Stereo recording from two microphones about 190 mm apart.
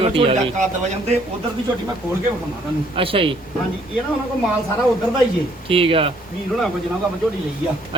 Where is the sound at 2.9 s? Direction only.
25° right (ahead or behind).